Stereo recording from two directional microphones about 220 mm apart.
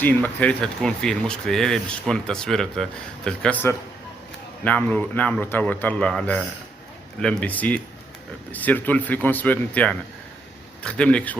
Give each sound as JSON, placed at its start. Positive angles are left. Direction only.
{"t": 0.0, "sound": "speech", "side_deg": 10}